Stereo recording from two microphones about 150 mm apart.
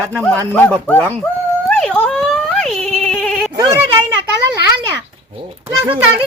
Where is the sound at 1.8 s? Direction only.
5° left (ahead or behind).